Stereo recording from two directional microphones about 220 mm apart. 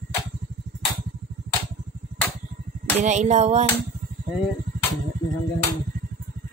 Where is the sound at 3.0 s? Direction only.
30° right (ahead or behind).